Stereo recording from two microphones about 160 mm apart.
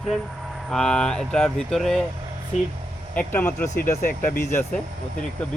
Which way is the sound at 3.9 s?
55° left (ahead or behind).